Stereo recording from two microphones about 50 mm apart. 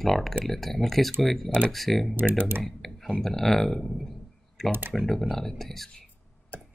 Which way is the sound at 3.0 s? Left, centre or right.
Centre.